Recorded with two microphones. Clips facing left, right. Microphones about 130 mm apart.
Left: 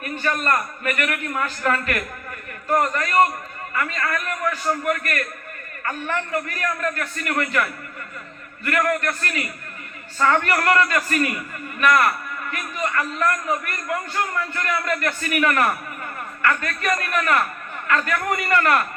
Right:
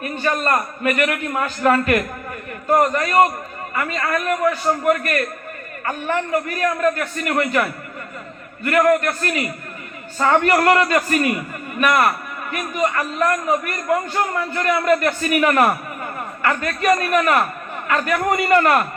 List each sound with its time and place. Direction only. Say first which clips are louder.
0.0 s a man's voice: right 3 dB; 25° right (ahead or behind)